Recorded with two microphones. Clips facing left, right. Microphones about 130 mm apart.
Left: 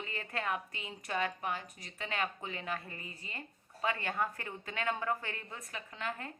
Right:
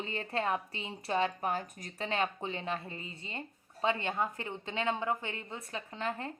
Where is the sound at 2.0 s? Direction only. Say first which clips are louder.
Right 4 dB; 30° right (ahead or behind).